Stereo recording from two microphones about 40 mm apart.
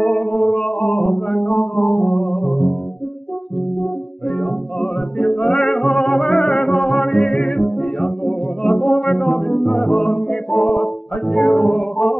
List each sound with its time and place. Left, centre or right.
0.0 s music: left
4.4 s music: left